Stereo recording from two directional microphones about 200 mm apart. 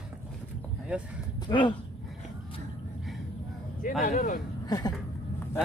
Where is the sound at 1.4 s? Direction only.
25° left (ahead or behind).